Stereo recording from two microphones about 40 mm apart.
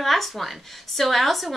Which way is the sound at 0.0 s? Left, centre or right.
Centre.